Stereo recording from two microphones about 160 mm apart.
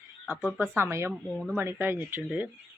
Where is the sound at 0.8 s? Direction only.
15° right (ahead or behind).